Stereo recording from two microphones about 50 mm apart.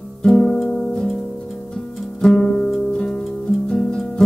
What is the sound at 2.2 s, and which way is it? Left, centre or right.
Music, centre.